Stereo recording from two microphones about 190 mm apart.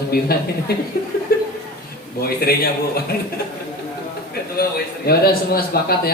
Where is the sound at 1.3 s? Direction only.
55° left (ahead or behind).